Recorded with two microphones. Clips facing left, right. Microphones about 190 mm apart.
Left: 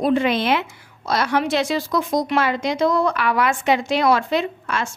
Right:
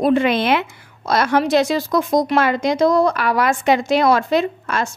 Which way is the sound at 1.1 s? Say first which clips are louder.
Right 4 dB; 50° right (ahead or behind).